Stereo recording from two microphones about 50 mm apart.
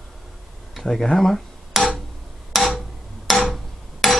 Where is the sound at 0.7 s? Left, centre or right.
Centre.